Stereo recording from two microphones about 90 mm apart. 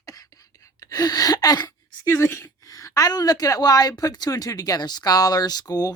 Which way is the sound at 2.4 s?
40° left (ahead or behind).